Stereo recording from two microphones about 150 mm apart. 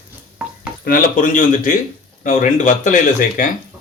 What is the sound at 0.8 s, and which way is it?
Speech, 70° left (ahead or behind).